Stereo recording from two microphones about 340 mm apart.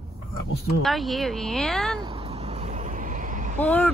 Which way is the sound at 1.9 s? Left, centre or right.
Centre.